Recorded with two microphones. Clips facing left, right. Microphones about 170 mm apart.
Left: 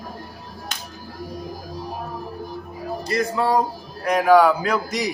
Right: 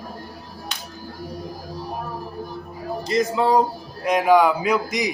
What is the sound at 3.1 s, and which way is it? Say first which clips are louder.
A man's voice: right 2 dB; 20° right (ahead or behind).